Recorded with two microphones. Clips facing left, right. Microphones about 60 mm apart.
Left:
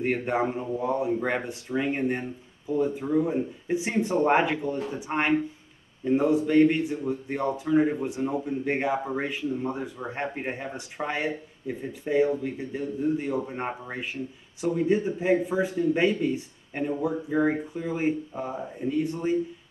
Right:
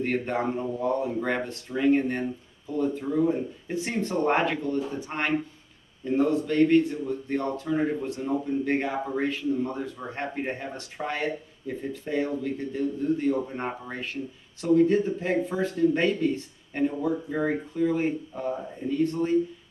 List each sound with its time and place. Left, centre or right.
0.0 s speech: centre